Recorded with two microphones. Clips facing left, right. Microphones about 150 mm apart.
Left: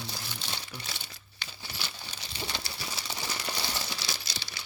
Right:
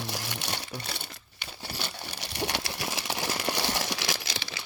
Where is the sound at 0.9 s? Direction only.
55° right (ahead or behind).